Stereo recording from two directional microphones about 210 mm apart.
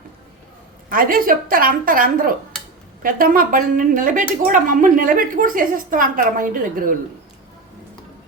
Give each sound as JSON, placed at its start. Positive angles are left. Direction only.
{"t": 0.9, "sound": "a woman's voice", "side_deg": -45}